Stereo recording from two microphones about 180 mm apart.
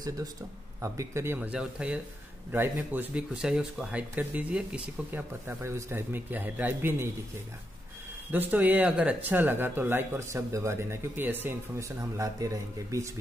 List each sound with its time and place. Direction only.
0.7 s speech: 15° right (ahead or behind)
8.3 s speech: 10° right (ahead or behind)